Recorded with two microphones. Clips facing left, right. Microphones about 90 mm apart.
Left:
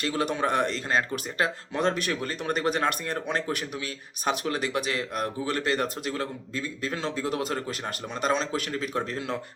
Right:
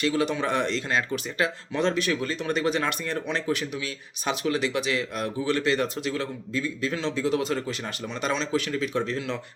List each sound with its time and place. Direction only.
0.0 s a man's voice: 45° left (ahead or behind)